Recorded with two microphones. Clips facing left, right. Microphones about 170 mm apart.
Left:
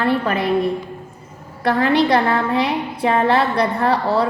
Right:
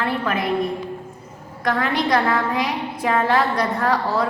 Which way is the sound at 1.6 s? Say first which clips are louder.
Left 5 dB; 30° left (ahead or behind).